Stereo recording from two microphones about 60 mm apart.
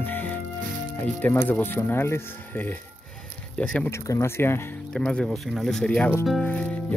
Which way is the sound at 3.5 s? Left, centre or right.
Centre.